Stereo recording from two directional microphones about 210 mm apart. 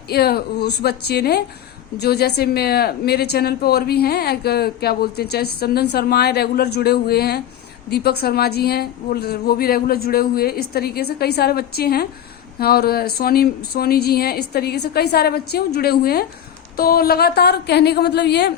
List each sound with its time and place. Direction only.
0.1 s a woman's voice: 50° left (ahead or behind)